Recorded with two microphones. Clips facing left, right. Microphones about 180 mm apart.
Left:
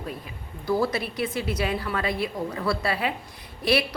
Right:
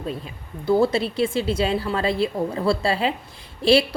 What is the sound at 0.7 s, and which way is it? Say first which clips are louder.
A woman's voice: right 6 dB; 25° right (ahead or behind).